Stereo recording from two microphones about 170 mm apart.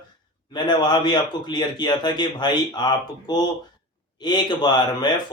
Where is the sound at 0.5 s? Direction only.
25° left (ahead or behind).